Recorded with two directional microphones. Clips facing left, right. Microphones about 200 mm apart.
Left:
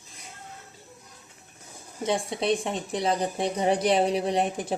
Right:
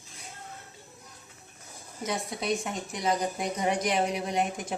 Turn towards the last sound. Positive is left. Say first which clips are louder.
# left 4 dB
turn(degrees=35)  # may be behind; listen again after turning